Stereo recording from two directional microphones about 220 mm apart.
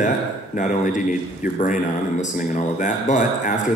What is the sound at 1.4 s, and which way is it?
Speech, 35° left (ahead or behind).